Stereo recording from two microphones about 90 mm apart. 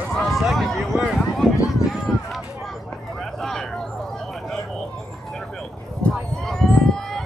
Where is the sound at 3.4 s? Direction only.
5° left (ahead or behind).